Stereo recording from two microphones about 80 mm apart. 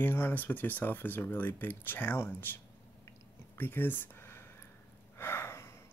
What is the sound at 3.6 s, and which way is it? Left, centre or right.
Speech, left.